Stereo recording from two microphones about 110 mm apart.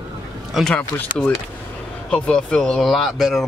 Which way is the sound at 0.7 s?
15° left (ahead or behind).